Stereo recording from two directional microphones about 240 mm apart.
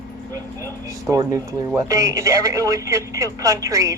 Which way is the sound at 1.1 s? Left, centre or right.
Centre.